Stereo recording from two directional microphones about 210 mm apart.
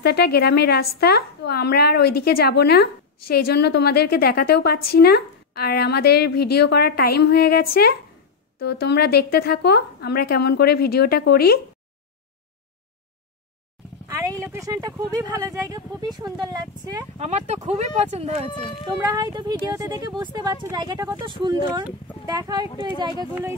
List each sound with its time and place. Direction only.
0.0 s a woman's voice: 50° left (ahead or behind)
14.0 s speech: 15° right (ahead or behind)
17.2 s speech: 35° right (ahead or behind)
19.1 s speech: 20° right (ahead or behind)